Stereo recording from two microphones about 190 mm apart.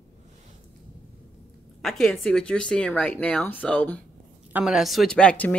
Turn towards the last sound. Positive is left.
turn(degrees=5)  # may be behind; listen again after turning